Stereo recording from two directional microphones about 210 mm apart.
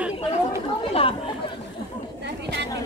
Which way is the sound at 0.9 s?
25° left (ahead or behind).